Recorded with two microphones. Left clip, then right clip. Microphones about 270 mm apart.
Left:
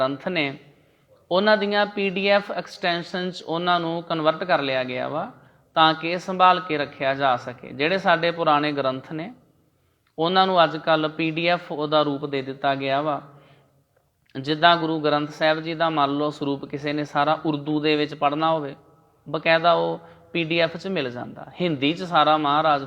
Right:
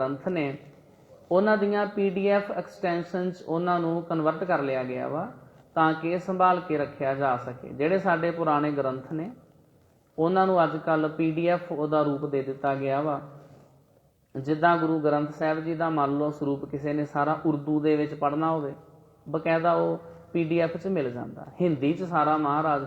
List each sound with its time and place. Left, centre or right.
0.0 s a man's voice: left
14.3 s a man's voice: left